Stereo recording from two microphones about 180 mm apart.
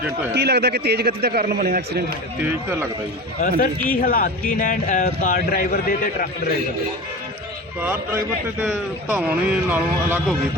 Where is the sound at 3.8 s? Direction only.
50° left (ahead or behind).